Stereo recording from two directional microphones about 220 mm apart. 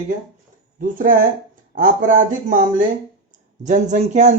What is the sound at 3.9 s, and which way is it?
Speech, 35° right (ahead or behind).